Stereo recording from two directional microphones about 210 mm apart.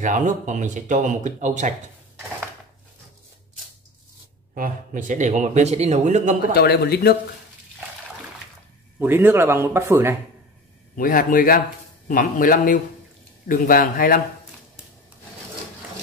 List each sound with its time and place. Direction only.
0.0 s speech: 35° right (ahead or behind)
4.6 s speech: 40° right (ahead or behind)
6.5 s speech: 50° left (ahead or behind)
9.0 s speech: 10° right (ahead or behind)
11.0 s a man's voice: 40° left (ahead or behind)